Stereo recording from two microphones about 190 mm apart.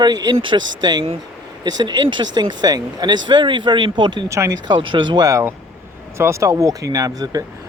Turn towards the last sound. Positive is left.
turn(degrees=-20)  # may be behind; listen again after turning